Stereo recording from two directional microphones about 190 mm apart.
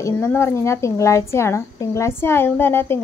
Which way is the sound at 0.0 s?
10° left (ahead or behind).